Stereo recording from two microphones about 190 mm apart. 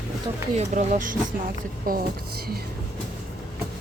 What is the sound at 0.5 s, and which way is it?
Speech, 40° right (ahead or behind).